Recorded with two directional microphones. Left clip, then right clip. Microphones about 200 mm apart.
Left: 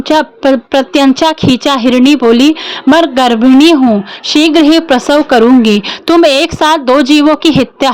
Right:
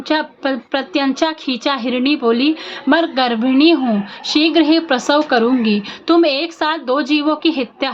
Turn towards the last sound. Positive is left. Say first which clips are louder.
# left 9 dB
turn(degrees=55)  # may be behind; listen again after turning